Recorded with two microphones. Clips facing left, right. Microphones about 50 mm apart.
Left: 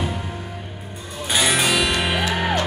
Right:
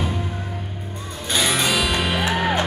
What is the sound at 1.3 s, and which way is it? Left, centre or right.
Music, centre.